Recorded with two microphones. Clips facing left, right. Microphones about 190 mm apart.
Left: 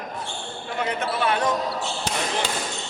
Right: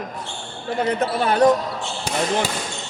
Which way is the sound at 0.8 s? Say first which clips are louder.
Right 3 dB; 40° right (ahead or behind).